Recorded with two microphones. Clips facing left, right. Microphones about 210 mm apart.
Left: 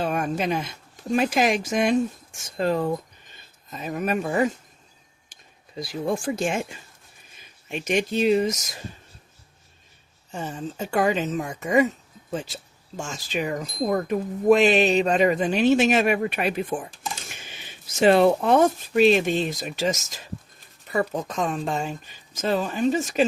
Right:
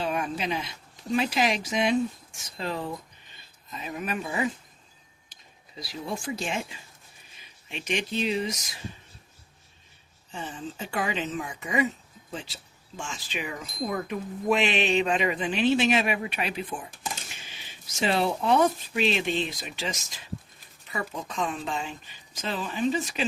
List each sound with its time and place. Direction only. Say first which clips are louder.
0.0 s speech: left 4 dB; 50° left (ahead or behind)
10.3 s speech: left 5 dB; 45° left (ahead or behind)